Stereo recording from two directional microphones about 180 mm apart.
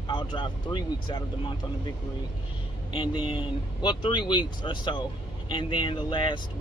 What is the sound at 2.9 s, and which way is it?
Speech, 25° left (ahead or behind).